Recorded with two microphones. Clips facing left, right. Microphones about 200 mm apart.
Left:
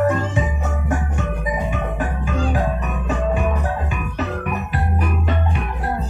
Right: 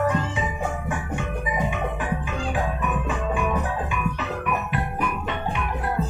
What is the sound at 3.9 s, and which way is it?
Music, 40° left (ahead or behind).